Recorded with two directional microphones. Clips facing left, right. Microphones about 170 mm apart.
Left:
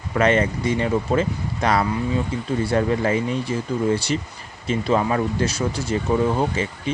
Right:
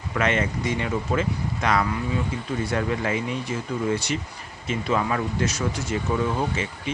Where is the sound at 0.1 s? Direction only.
35° left (ahead or behind).